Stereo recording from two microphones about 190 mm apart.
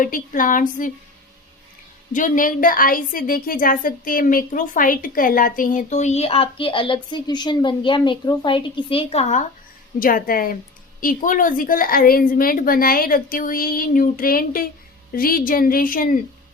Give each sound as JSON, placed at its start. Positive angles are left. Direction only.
{"t": 0.0, "sound": "a woman's voice", "side_deg": 45}
{"t": 2.1, "sound": "a woman's voice", "side_deg": 45}
{"t": 10.0, "sound": "a woman's voice", "side_deg": 50}